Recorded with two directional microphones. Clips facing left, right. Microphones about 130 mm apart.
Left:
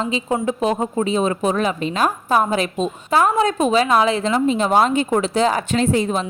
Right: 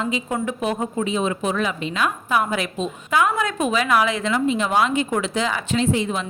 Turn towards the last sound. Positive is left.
turn(degrees=40)  # may be behind; listen again after turning